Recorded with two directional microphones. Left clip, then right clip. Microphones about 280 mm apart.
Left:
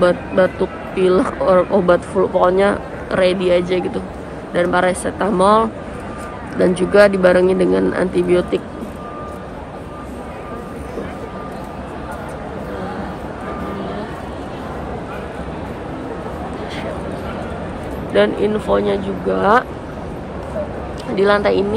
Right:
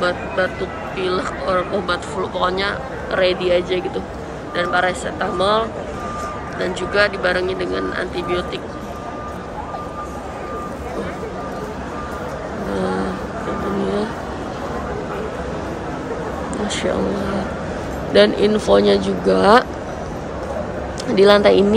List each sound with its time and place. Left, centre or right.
0.9 s a man's voice: centre
6.6 s speech: centre
18.1 s speech: centre
21.1 s speech: centre